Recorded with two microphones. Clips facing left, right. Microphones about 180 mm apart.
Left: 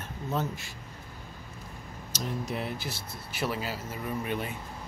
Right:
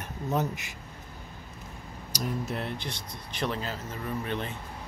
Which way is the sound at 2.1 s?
10° right (ahead or behind).